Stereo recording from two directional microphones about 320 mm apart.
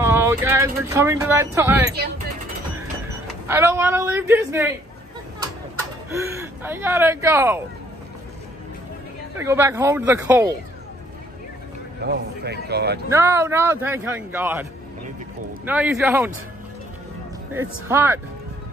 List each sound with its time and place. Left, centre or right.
0.0 s speech: centre
3.4 s speech: centre
6.1 s speech: centre
9.4 s speech: centre
12.0 s a man's voice: right
13.1 s a man's voice: centre
17.6 s speech: centre